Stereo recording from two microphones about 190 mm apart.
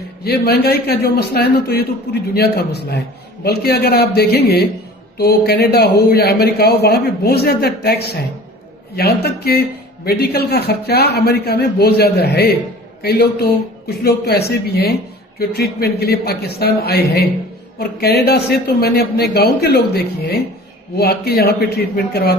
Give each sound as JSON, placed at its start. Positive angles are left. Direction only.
{"t": 0.3, "sound": "a man's voice", "side_deg": 55}